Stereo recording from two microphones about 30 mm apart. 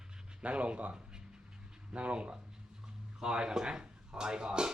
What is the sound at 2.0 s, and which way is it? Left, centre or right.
Speech, right.